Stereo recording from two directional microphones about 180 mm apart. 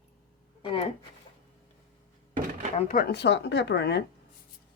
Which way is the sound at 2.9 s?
55° left (ahead or behind).